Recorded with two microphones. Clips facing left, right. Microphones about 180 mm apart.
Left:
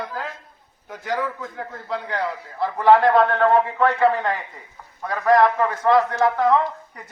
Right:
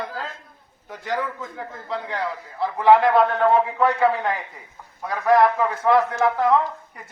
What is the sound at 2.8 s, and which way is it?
A man's voice, 5° right (ahead or behind).